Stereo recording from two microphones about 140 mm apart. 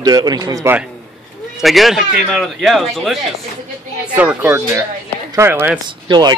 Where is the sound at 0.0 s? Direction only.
30° right (ahead or behind).